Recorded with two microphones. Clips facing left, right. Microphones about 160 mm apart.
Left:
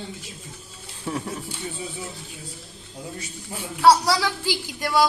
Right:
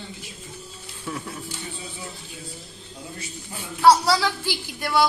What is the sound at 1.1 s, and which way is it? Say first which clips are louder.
Speech: left 3 dB; 35° left (ahead or behind).